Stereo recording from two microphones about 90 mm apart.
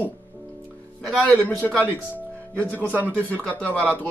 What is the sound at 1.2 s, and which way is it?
Speech, 15° left (ahead or behind).